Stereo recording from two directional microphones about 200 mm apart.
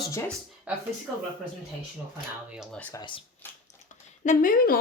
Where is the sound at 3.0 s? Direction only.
25° left (ahead or behind).